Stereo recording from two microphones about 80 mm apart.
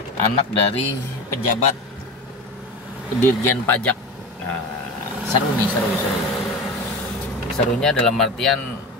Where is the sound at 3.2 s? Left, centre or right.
Left.